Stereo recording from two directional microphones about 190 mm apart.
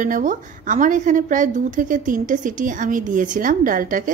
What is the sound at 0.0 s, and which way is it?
A woman's voice, 45° right (ahead or behind).